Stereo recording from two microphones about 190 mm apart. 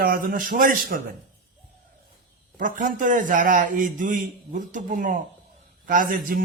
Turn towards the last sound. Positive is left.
turn(degrees=-50)  # may be behind; listen again after turning